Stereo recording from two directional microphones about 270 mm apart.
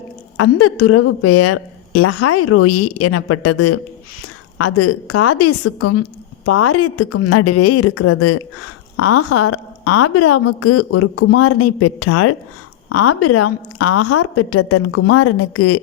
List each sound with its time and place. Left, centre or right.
0.3 s a woman's voice: left